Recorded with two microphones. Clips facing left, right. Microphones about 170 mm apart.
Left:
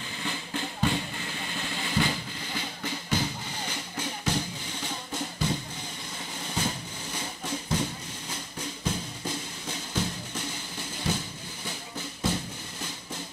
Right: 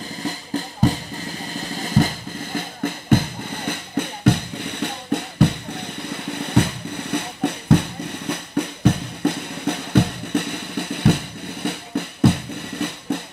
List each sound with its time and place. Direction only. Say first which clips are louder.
0.2 s music: right 7 dB; 40° right (ahead or behind)
2.5 s music: right 9 dB; 55° right (ahead or behind)